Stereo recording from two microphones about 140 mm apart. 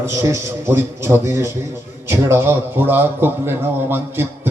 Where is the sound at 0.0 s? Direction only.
20° right (ahead or behind).